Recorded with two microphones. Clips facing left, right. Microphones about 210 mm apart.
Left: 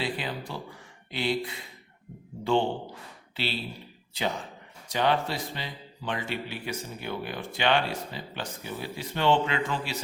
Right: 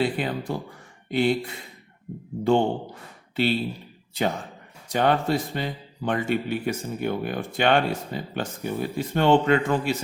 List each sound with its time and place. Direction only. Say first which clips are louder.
0.0 s speech: right 7 dB; 50° right (ahead or behind)
4.9 s speech: right 5 dB; 50° right (ahead or behind)